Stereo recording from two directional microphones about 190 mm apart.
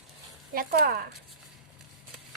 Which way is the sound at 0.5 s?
55° right (ahead or behind).